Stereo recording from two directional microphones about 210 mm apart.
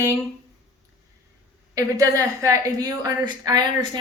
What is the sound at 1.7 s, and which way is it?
A woman's voice, 15° right (ahead or behind).